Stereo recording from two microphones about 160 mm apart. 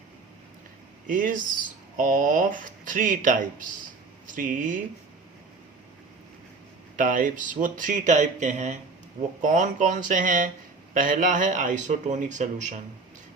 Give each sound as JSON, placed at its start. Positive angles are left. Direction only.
{"t": 1.0, "sound": "speech", "side_deg": -55}
{"t": 6.9, "sound": "speech", "side_deg": -55}